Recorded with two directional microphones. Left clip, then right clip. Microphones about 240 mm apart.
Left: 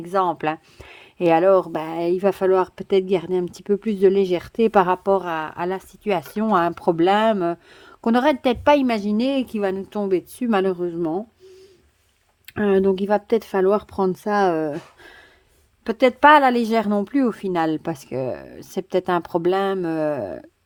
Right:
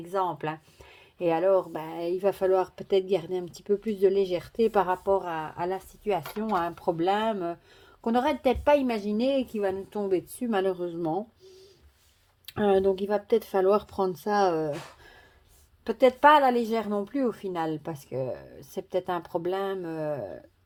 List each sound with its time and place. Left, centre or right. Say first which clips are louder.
0.1 s a woman's voice: left 8 dB; left
12.5 s a woman's voice: left 5 dB; left